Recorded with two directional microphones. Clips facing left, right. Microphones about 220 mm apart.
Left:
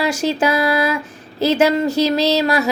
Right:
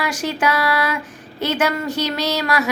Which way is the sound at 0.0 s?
25° left (ahead or behind).